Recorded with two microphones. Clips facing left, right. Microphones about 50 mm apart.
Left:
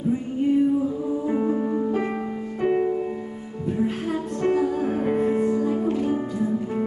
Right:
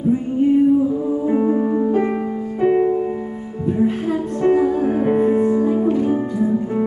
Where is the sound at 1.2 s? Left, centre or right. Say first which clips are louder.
Right 6 dB; centre.